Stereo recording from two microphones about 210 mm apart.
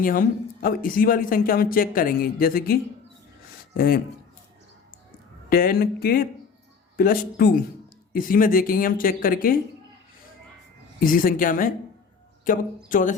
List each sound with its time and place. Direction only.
0.0 s speech: 40° left (ahead or behind)
3.8 s speech: 45° left (ahead or behind)
5.5 s speech: 45° left (ahead or behind)
11.0 s speech: 40° left (ahead or behind)